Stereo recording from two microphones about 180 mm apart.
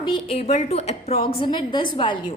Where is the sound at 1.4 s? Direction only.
25° left (ahead or behind).